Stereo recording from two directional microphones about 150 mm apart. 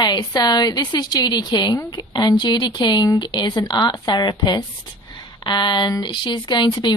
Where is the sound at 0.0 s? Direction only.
25° left (ahead or behind).